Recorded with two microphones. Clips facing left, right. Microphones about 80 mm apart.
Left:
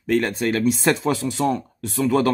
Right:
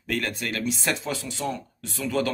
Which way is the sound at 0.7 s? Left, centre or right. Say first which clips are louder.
Left 8 dB; left.